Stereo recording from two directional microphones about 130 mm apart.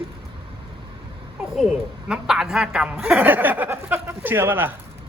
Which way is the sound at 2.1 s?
5° right (ahead or behind).